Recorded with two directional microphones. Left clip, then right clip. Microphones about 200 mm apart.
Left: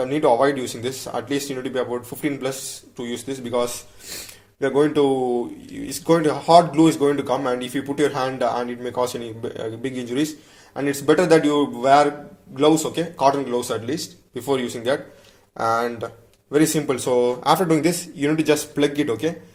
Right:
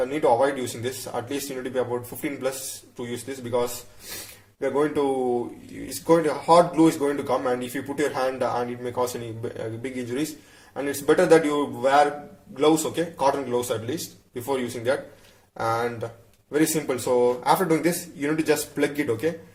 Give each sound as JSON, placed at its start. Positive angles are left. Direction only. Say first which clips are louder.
{"t": 0.0, "sound": "speech", "louder": "left 3 dB", "side_deg": 30}
{"t": 3.0, "sound": "speech", "louder": "left 4 dB", "side_deg": 30}